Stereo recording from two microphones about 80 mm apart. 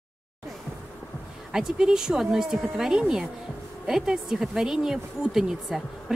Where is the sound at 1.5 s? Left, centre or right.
Centre.